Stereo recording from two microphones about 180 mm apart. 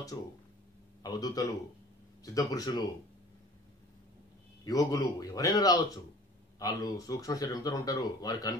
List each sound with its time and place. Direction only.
1.0 s speech: 20° left (ahead or behind)
4.6 s speech: 20° left (ahead or behind)